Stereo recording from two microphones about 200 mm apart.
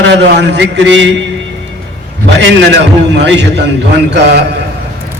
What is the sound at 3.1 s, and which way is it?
Speech, 60° right (ahead or behind).